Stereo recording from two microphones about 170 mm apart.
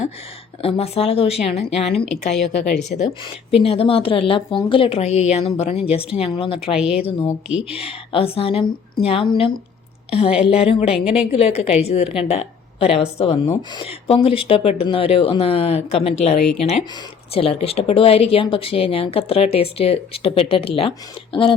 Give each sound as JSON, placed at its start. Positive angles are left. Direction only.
{"t": 0.6, "sound": "speech", "side_deg": 35}
{"t": 2.3, "sound": "a woman's voice", "side_deg": 80}
{"t": 3.2, "sound": "a woman's voice", "side_deg": 35}